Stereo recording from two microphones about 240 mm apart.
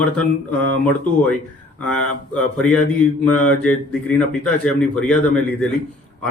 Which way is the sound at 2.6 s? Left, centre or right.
Centre.